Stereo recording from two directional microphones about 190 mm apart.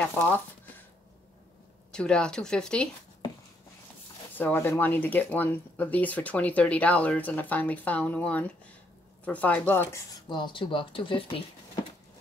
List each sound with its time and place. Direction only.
0.0 s speech: 10° left (ahead or behind)
1.9 s speech: 5° left (ahead or behind)
4.4 s speech: 10° left (ahead or behind)
10.2 s speech: 25° left (ahead or behind)